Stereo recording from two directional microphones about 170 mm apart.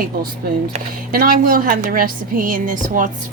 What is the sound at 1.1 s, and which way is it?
A woman's voice, 55° right (ahead or behind).